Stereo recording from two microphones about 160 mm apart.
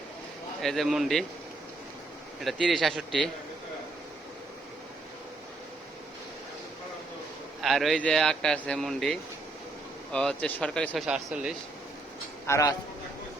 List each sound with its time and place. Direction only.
0.6 s a man's voice: centre (ahead or behind)
2.4 s a man's voice: centre (ahead or behind)
7.6 s a man's voice: centre (ahead or behind)
12.5 s a man's voice: 20° left (ahead or behind)